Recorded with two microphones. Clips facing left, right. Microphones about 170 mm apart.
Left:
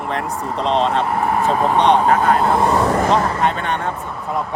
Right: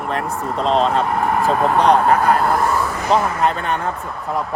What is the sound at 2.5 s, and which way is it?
Speech, 20° left (ahead or behind).